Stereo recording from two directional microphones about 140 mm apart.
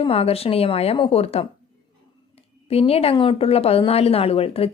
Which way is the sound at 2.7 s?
45° left (ahead or behind).